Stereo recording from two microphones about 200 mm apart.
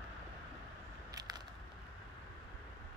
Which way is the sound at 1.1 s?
20° right (ahead or behind).